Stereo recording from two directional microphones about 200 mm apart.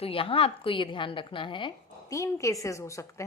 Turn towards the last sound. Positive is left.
turn(degrees=15)  # may be behind; listen again after turning